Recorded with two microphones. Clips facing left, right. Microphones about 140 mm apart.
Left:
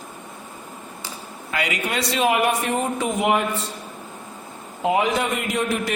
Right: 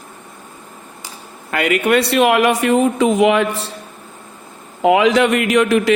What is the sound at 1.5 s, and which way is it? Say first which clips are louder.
Speech: right 10 dB; 55° right (ahead or behind).